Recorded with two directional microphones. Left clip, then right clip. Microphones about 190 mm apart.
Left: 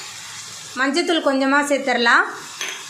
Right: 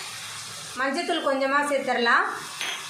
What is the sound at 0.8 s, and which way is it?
A woman's voice, 50° left (ahead or behind).